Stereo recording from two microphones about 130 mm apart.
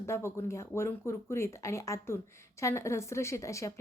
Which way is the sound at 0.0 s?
20° left (ahead or behind).